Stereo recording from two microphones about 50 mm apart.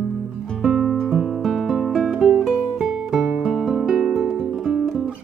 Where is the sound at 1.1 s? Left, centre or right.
Centre.